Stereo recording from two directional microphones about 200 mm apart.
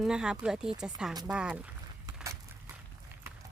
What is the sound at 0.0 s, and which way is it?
Speech, 5° right (ahead or behind).